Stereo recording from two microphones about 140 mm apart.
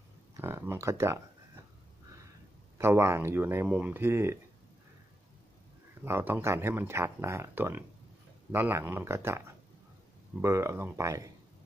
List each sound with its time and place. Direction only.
0.4 s speech: 20° right (ahead or behind)
2.8 s speech: 20° right (ahead or behind)
6.0 s speech: 15° right (ahead or behind)
10.4 s speech: 20° right (ahead or behind)